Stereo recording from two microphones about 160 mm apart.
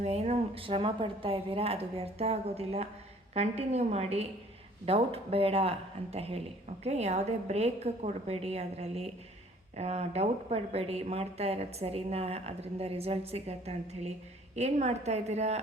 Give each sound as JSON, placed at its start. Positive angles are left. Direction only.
{"t": 0.0, "sound": "a woman's voice", "side_deg": -40}